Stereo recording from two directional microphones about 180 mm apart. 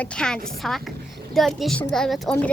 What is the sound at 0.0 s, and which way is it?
A child's voice, 5° left (ahead or behind).